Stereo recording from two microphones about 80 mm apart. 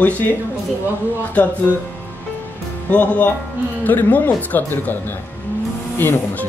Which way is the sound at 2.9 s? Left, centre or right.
Centre.